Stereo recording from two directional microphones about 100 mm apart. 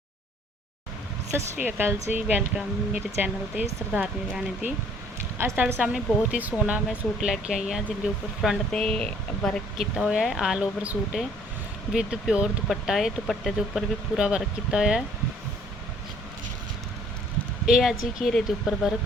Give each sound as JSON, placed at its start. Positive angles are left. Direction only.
{"t": 1.6, "sound": "speech", "side_deg": -20}
{"t": 2.2, "sound": "speech", "side_deg": -10}
{"t": 4.0, "sound": "speech", "side_deg": 0}
{"t": 5.5, "sound": "speech", "side_deg": -20}
{"t": 8.7, "sound": "speech", "side_deg": 10}
{"t": 9.7, "sound": "speech", "side_deg": -5}
{"t": 17.7, "sound": "speech", "side_deg": 0}